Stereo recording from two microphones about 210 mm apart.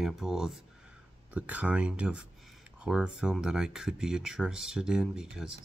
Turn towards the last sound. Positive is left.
turn(degrees=0)  # may be behind; listen again after turning